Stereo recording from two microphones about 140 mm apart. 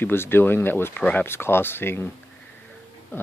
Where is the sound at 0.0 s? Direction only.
15° left (ahead or behind).